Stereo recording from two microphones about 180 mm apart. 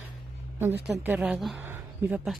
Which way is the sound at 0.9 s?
5° right (ahead or behind).